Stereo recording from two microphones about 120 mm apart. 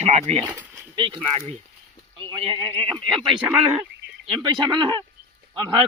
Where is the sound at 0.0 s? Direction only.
65° right (ahead or behind).